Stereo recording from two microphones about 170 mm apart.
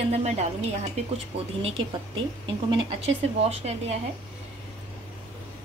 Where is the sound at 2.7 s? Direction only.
35° right (ahead or behind).